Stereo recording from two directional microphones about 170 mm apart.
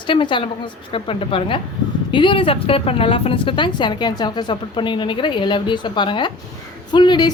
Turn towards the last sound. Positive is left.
turn(degrees=25)  # may be behind; listen again after turning